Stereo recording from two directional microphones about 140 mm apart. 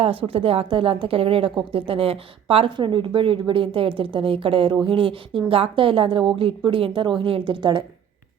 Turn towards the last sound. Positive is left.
turn(degrees=-35)  # may be behind; listen again after turning